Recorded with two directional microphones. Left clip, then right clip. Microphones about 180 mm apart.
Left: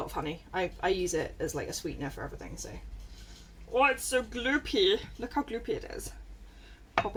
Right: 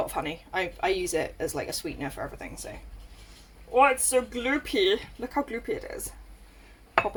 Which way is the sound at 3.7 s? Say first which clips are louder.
Right 5 dB; 20° right (ahead or behind).